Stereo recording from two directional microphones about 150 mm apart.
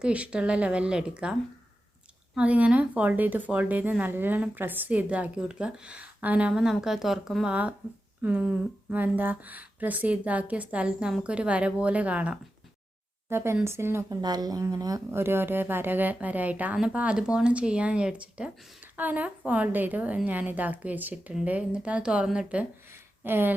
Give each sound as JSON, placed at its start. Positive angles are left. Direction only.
{"t": 0.0, "sound": "speech", "side_deg": -10}